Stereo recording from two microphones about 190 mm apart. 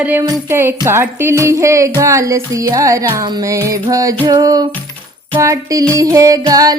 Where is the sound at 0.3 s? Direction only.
10° right (ahead or behind).